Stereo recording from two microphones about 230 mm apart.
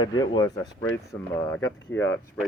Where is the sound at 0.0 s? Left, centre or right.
Centre.